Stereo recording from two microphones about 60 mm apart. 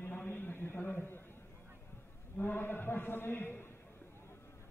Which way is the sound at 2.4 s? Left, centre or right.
Left.